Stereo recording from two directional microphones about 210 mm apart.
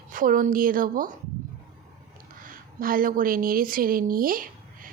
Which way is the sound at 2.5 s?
40° right (ahead or behind).